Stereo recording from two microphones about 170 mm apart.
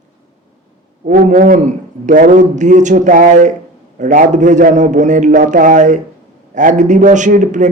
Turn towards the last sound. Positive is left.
turn(degrees=-45)  # may be behind; listen again after turning